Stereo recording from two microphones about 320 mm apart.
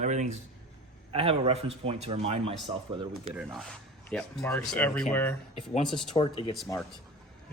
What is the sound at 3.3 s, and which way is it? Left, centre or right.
Speech, centre.